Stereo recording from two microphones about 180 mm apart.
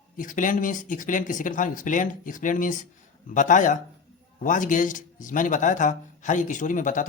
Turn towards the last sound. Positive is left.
turn(degrees=45)  # may be behind; listen again after turning